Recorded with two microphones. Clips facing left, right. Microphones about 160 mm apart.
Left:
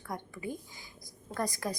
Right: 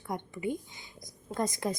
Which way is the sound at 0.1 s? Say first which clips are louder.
Right 5 dB; 20° right (ahead or behind).